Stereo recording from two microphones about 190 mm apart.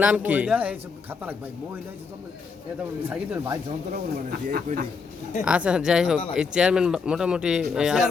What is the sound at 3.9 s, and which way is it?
Speech, 45° right (ahead or behind).